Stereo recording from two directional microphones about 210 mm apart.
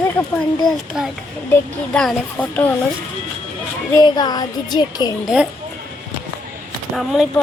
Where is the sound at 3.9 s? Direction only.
20° left (ahead or behind).